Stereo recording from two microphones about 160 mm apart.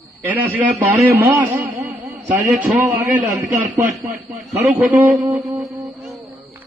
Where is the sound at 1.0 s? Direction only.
15° right (ahead or behind).